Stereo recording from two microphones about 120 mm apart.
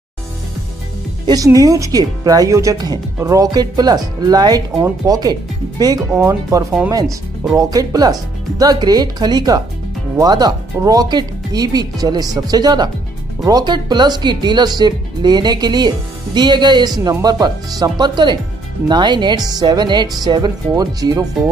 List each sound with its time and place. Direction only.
1.2 s speech: 30° right (ahead or behind)